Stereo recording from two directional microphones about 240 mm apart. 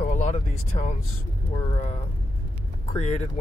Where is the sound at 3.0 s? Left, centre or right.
Left.